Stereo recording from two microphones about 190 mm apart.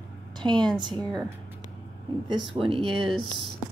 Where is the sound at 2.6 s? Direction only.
30° right (ahead or behind).